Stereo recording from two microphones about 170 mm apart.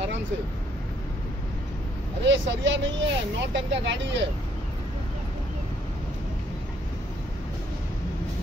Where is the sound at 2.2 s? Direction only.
90° right.